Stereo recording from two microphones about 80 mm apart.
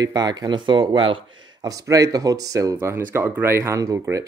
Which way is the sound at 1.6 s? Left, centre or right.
Right.